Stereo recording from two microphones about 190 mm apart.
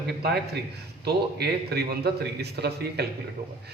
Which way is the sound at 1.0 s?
55° right (ahead or behind).